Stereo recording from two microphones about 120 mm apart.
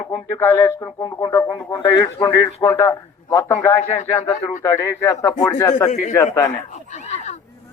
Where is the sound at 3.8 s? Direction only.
65° left (ahead or behind).